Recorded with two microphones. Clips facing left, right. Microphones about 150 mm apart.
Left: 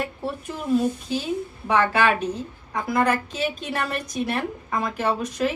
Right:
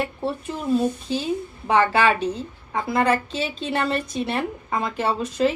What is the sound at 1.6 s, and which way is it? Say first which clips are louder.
A woman's voice: right 2 dB; 30° right (ahead or behind).